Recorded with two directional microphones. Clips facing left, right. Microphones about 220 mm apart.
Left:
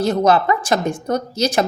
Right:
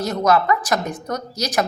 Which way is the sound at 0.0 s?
30° left (ahead or behind).